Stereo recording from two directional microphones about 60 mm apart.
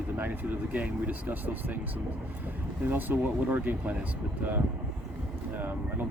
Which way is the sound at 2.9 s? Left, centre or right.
Right.